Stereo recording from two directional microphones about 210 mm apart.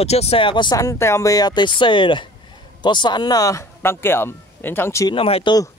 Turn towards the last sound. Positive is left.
turn(degrees=20)  # may be behind; listen again after turning